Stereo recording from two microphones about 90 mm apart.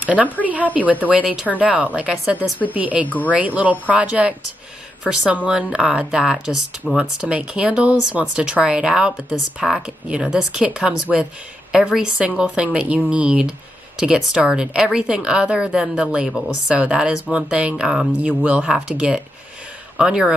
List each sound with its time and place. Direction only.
0.0 s a woman's voice: 15° right (ahead or behind)